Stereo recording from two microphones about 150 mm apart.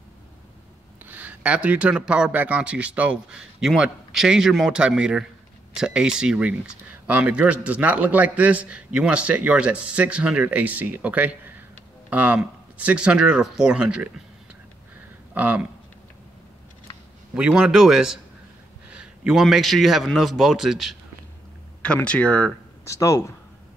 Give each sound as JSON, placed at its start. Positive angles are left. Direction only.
{"t": 1.0, "sound": "speech", "side_deg": -10}
{"t": 15.3, "sound": "speech", "side_deg": -10}
{"t": 17.3, "sound": "a man's voice", "side_deg": -5}
{"t": 22.8, "sound": "speech", "side_deg": 20}